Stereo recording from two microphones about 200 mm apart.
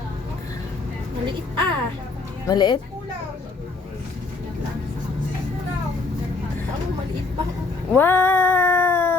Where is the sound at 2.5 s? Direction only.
20° left (ahead or behind).